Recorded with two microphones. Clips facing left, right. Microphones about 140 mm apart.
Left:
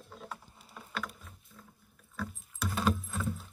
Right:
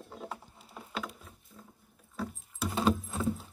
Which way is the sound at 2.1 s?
25° right (ahead or behind).